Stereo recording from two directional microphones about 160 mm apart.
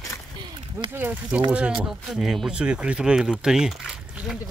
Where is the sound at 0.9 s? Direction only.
10° right (ahead or behind).